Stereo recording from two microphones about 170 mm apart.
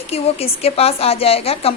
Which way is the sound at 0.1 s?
35° left (ahead or behind).